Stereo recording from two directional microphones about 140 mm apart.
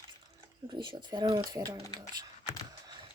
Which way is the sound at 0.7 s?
35° right (ahead or behind).